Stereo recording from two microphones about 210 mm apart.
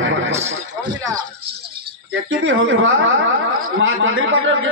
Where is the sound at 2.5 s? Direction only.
70° right (ahead or behind).